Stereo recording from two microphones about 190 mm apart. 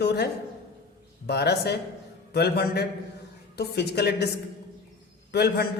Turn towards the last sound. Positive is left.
turn(degrees=55)  # may be behind; listen again after turning